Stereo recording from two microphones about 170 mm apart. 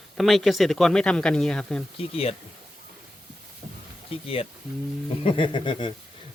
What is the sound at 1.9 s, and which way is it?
Speech, 35° left (ahead or behind).